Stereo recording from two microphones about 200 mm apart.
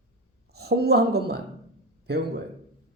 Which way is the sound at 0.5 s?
55° right (ahead or behind).